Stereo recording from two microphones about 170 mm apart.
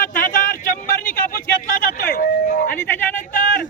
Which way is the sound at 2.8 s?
10° left (ahead or behind).